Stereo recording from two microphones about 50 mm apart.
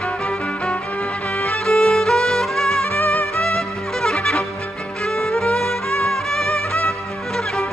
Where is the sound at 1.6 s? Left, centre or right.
Centre.